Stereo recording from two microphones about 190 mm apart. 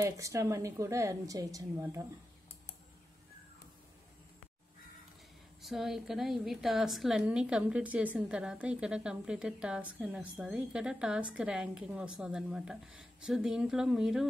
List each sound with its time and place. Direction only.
0.0 s a woman's voice: 15° right (ahead or behind)
5.6 s a woman's voice: centre (ahead or behind)